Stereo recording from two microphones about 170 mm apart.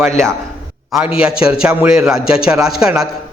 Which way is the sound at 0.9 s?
5° right (ahead or behind).